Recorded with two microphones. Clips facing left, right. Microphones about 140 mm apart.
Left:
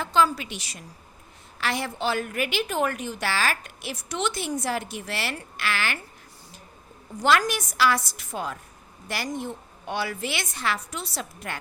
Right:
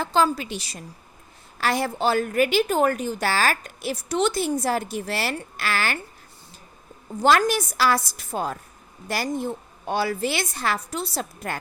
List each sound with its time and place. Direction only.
0.0 s a woman's voice: 35° right (ahead or behind)
7.2 s a woman's voice: 35° right (ahead or behind)